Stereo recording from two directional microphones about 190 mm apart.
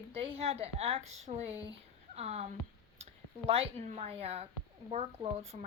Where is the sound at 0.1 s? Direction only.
30° right (ahead or behind).